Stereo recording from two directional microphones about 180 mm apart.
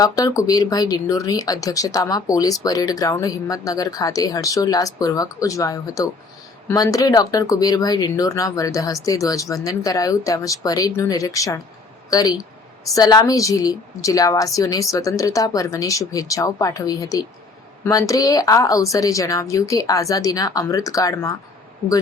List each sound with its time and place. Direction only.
0.0 s a woman's voice: 20° left (ahead or behind)